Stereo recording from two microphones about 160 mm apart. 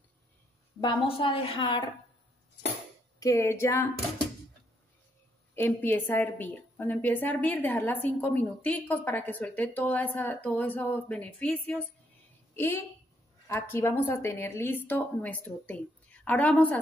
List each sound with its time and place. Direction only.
0.7 s a woman's voice: 30° left (ahead or behind)
3.2 s a woman's voice: 20° left (ahead or behind)
5.6 s a woman's voice: 15° left (ahead or behind)